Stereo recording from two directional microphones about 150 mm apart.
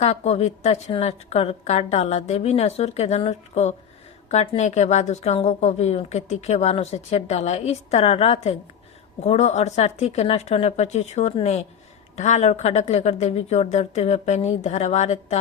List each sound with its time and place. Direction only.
0.0 s a woman's voice: 45° left (ahead or behind)